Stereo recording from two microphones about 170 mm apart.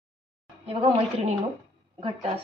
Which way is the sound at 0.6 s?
35° right (ahead or behind).